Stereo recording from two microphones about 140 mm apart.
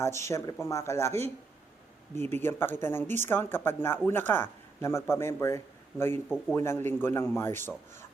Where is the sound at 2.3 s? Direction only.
15° left (ahead or behind).